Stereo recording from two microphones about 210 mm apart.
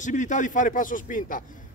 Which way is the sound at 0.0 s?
35° left (ahead or behind).